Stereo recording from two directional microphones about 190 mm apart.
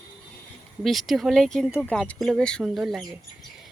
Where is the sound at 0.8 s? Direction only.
Centre (ahead or behind).